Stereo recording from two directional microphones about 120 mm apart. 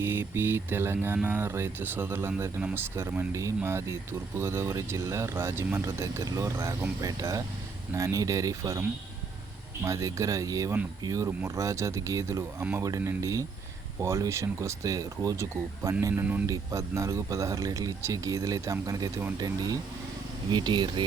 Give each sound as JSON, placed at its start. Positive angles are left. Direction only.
{"t": 0.0, "sound": "speech", "side_deg": -20}
{"t": 9.8, "sound": "speech", "side_deg": -25}